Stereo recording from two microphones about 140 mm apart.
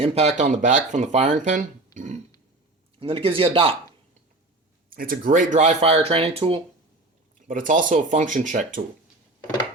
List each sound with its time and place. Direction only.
0.0 s speech: 45° right (ahead or behind); by 2.2 s 65° right (ahead or behind)
3.0 s speech: 40° right (ahead or behind)
4.9 s speech: 90° right; by 6.6 s 40° right (ahead or behind)
7.3 s speech: 70° right (ahead or behind)